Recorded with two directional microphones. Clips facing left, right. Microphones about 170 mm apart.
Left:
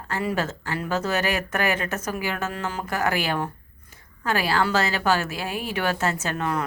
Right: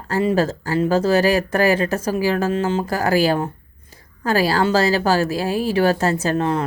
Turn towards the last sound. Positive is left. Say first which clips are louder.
# right 7 dB
turn(degrees=-30)  # may be behind; listen again after turning